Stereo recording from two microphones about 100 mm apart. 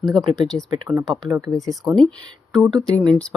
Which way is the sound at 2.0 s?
10° left (ahead or behind).